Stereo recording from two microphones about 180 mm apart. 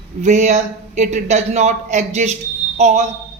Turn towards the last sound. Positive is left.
turn(degrees=-40)  # may be behind; listen again after turning